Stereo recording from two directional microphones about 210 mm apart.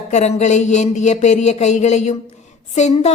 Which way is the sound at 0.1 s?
30° left (ahead or behind).